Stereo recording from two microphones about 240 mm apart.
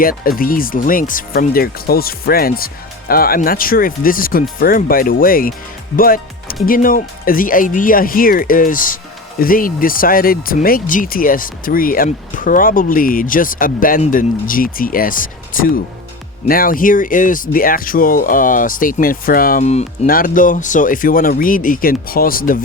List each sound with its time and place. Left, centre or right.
0.0 s speech: left